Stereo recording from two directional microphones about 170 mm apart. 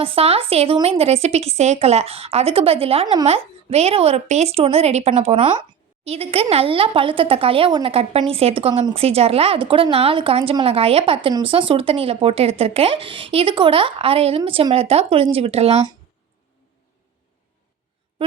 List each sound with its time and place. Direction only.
0.0 s speech: 35° right (ahead or behind)